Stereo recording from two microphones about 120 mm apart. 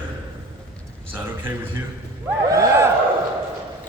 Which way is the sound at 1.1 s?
15° right (ahead or behind).